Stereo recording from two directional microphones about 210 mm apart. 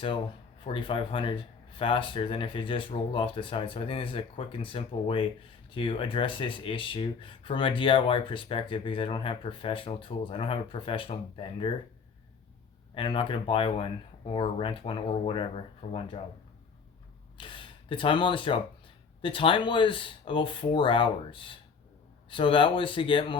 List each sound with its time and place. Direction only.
0.6 s speech: 25° left (ahead or behind)
12.9 s speech: 25° left (ahead or behind)
17.3 s speech: 25° left (ahead or behind)